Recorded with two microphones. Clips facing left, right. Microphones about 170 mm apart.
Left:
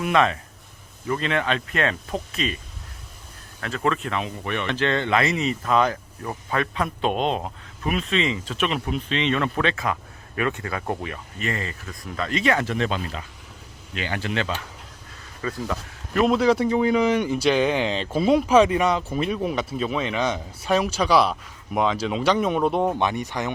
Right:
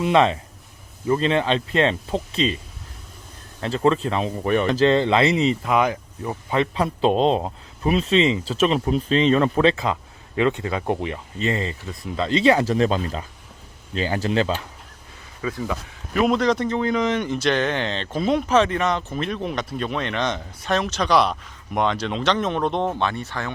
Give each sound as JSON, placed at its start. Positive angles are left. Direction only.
{"t": 0.0, "sound": "speech", "side_deg": -25}
{"t": 3.6, "sound": "speech", "side_deg": -30}
{"t": 5.7, "sound": "speech", "side_deg": -15}
{"t": 15.4, "sound": "a man's voice", "side_deg": -5}